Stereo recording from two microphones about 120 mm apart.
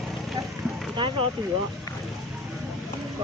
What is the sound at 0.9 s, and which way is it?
Speech, 45° right (ahead or behind).